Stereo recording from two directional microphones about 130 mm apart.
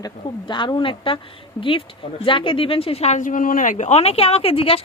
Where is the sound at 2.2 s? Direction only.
40° left (ahead or behind).